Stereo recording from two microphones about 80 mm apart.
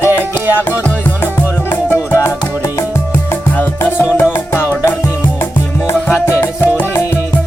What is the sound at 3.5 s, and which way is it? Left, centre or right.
Music, left.